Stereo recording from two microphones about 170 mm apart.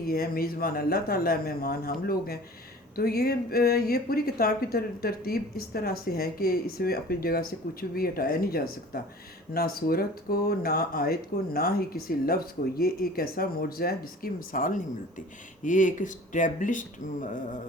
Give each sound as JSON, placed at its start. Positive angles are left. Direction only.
{"t": 0.0, "sound": "speech", "side_deg": 60}